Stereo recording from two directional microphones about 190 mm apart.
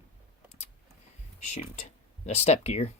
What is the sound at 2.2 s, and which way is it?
Speech, 35° left (ahead or behind).